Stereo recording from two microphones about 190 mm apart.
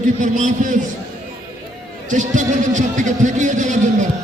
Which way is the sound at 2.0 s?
40° right (ahead or behind).